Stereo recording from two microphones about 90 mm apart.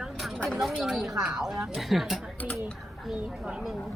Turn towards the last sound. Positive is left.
turn(degrees=-10)  # may be behind; listen again after turning